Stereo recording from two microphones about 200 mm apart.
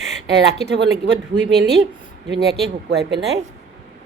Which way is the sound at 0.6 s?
60° right (ahead or behind).